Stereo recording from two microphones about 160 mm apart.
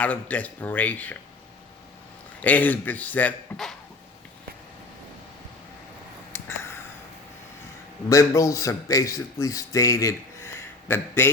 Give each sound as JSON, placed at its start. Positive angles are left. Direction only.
{"t": 0.0, "sound": "a man's voice", "side_deg": 10}
{"t": 2.4, "sound": "a man's voice", "side_deg": 10}
{"t": 8.1, "sound": "speech", "side_deg": 20}